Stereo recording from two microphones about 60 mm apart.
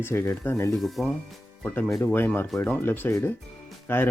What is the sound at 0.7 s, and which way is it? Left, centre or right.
Speech, centre.